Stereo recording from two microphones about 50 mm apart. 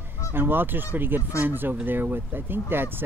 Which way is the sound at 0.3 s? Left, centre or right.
Right.